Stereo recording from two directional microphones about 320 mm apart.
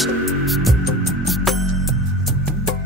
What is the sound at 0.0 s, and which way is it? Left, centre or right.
Music, centre.